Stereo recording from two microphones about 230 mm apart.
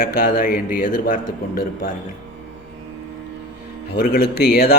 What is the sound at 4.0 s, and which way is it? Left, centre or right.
Speech, left.